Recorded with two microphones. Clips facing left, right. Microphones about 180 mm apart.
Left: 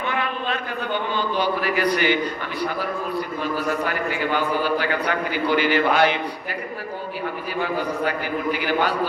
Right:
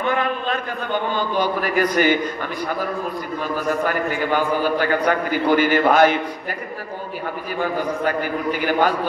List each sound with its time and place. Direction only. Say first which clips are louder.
0.1 s a sound: right 4 dB; 45° right (ahead or behind)
1.1 s a man's voice: even; 45° right (ahead or behind)
3.6 s a man's voice: right 3 dB; 45° right (ahead or behind)
8.0 s a man's voice: right 2 dB; 45° right (ahead or behind)